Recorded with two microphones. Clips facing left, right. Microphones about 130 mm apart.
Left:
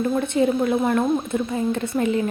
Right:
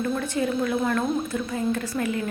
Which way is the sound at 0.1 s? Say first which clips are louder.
Left 5 dB; 25° left (ahead or behind).